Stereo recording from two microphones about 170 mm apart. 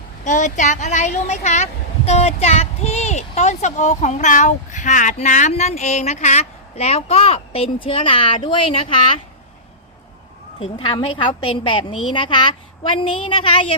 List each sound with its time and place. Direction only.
0.3 s a woman's voice: 45° left (ahead or behind)
10.6 s a woman's voice: 30° left (ahead or behind)